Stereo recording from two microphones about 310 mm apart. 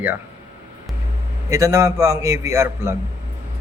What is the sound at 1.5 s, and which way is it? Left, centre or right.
A man's voice, centre.